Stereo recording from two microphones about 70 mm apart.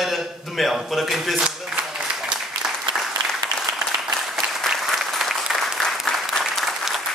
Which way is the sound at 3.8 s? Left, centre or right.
Centre.